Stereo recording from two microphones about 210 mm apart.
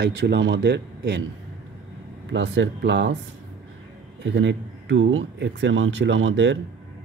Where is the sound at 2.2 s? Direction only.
60° right (ahead or behind).